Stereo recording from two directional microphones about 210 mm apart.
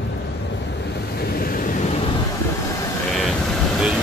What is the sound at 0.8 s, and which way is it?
Waves, 50° left (ahead or behind).